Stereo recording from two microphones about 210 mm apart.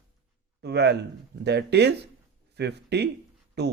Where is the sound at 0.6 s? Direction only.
55° right (ahead or behind).